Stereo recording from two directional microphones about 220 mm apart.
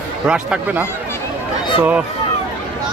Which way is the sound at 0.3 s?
5° right (ahead or behind).